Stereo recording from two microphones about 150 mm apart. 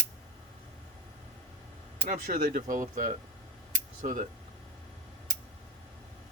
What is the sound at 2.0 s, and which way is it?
Speech, 60° right (ahead or behind).